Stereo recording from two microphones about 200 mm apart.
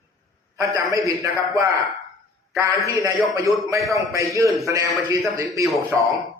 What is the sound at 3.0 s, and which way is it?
A man's voice, 15° right (ahead or behind).